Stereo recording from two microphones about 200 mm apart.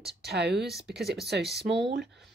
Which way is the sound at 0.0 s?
55° right (ahead or behind).